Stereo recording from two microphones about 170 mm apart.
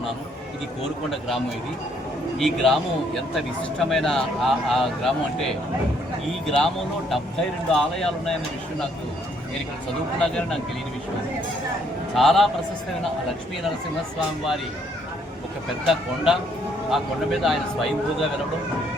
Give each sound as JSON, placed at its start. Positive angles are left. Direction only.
{"t": 2.4, "sound": "speech", "side_deg": 0}
{"t": 7.7, "sound": "speech", "side_deg": 0}
{"t": 10.2, "sound": "speech", "side_deg": 5}
{"t": 12.1, "sound": "speech", "side_deg": 0}
{"t": 15.9, "sound": "speech", "side_deg": 0}